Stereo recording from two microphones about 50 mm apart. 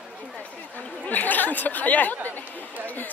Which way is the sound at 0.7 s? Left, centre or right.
Left.